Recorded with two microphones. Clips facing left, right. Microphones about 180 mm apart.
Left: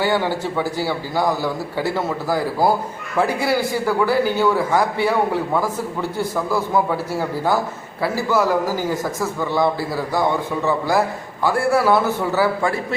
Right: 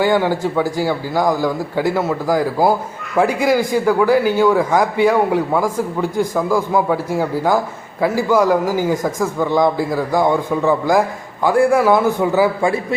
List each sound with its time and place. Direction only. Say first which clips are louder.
0.0 s a man's voice: right 4 dB; 15° right (ahead or behind)